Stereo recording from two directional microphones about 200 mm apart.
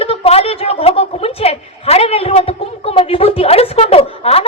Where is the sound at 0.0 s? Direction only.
30° left (ahead or behind).